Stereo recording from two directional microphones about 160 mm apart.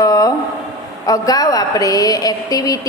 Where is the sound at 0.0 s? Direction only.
20° left (ahead or behind).